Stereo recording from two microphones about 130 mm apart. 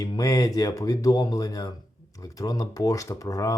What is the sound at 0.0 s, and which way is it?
Speech, 30° left (ahead or behind).